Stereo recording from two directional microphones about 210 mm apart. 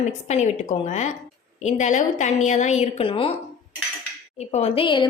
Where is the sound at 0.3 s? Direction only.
35° left (ahead or behind).